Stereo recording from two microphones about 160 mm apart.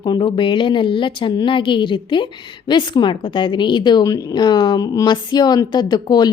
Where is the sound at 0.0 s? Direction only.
30° left (ahead or behind).